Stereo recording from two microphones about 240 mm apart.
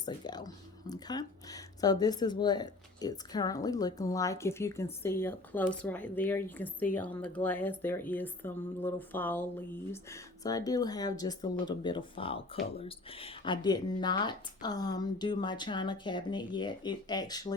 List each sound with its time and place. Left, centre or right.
0.0 s speech: centre